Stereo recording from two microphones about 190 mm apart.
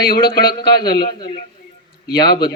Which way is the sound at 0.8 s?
20° left (ahead or behind).